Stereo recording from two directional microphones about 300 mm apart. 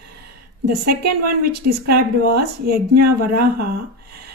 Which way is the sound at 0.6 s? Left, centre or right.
Right.